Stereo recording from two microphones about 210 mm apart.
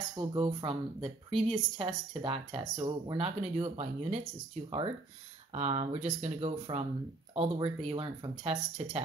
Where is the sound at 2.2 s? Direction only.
25° right (ahead or behind).